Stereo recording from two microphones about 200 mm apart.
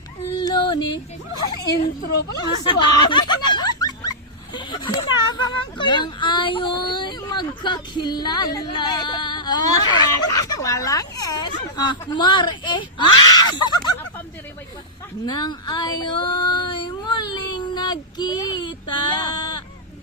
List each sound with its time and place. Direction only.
0.3 s yodeling: 20° left (ahead or behind)
1.4 s speech: 20° left (ahead or behind)
1.8 s speech: 45° left (ahead or behind)
2.6 s speech: 25° left (ahead or behind)
15.3 s child singing: 20° left (ahead or behind)